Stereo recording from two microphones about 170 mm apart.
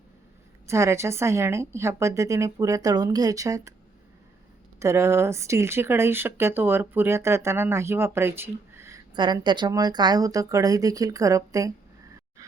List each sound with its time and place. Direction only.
0.7 s a woman's voice: 15° right (ahead or behind)
4.8 s speech: 15° right (ahead or behind)
9.1 s a woman's voice: 25° right (ahead or behind)